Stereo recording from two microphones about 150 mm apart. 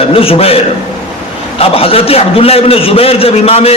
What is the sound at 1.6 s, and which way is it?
A man's voice, 40° left (ahead or behind).